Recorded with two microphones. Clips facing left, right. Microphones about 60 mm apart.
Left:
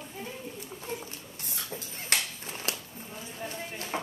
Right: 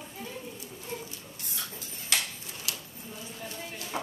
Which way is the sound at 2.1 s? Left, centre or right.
Left.